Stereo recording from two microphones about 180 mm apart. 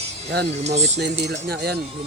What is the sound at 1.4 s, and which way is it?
Speech, 60° right (ahead or behind).